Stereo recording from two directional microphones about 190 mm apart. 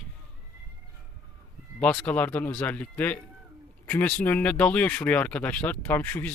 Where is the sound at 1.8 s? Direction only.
5° left (ahead or behind).